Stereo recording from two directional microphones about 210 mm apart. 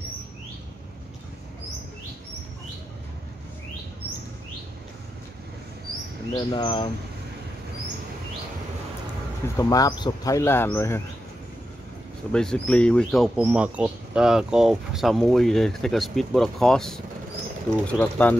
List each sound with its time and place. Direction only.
6.3 s speech: 20° left (ahead or behind)
9.6 s speech: 15° left (ahead or behind)
12.3 s speech: 5° left (ahead or behind)